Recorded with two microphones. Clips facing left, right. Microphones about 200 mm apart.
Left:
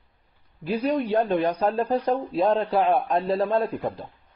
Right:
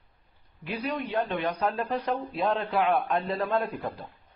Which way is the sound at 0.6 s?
35° left (ahead or behind).